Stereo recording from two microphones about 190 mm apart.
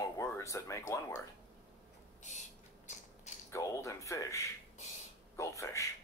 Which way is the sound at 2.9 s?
40° left (ahead or behind).